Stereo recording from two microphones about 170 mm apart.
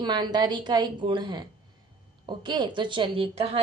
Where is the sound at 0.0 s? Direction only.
25° right (ahead or behind).